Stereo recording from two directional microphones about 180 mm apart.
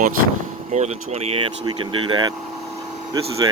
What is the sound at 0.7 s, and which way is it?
Speech, 40° right (ahead or behind).